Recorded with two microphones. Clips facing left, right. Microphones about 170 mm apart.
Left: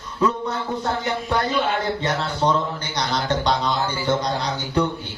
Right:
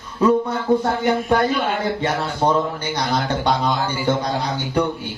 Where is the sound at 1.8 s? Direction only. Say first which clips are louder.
Right 2 dB; 10° right (ahead or behind).